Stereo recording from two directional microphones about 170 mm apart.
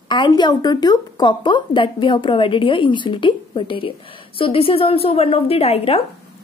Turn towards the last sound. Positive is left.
turn(degrees=35)  # may be behind; listen again after turning